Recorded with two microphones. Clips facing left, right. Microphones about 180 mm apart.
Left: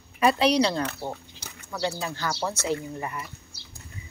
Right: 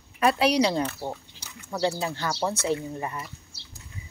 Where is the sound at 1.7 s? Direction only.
30° right (ahead or behind).